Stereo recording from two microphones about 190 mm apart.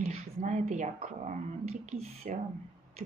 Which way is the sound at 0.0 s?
35° right (ahead or behind).